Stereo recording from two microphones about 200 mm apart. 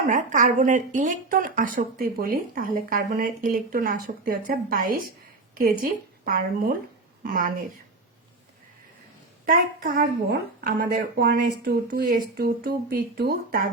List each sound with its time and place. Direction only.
0.1 s a woman's voice: 40° right (ahead or behind)
9.5 s a woman's voice: 45° right (ahead or behind)